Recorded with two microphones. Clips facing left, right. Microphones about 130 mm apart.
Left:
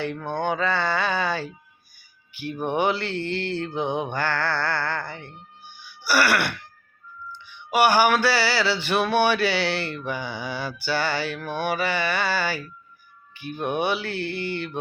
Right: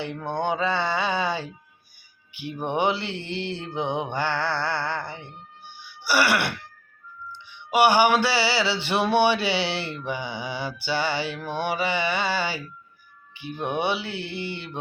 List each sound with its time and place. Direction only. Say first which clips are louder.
0.0 s music: left 1 dB; 20° right (ahead or behind)
6.0 s throat clearing: left 1 dB; 20° right (ahead or behind)
7.4 s music: right 1 dB; 20° right (ahead or behind)